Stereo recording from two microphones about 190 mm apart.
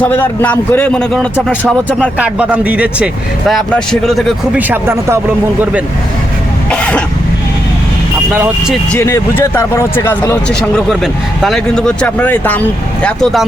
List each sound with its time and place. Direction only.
0.0 s speech: 10° left (ahead or behind)
2.1 s speech: 5° right (ahead or behind)
4.7 s speech: 15° right (ahead or behind)
6.7 s cough: 5° left (ahead or behind)
8.9 s speech: 15° left (ahead or behind)